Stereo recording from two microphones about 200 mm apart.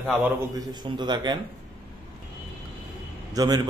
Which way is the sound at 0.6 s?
20° right (ahead or behind).